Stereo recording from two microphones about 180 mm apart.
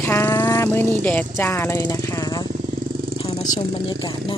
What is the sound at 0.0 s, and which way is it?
Speech, 15° left (ahead or behind).